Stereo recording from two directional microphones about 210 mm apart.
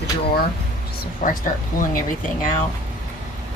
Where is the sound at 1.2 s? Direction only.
40° left (ahead or behind).